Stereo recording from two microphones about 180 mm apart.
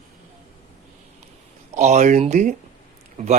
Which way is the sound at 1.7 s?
40° right (ahead or behind).